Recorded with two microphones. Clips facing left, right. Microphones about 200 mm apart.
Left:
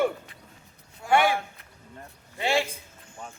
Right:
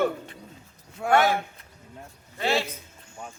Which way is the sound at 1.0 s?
70° right (ahead or behind).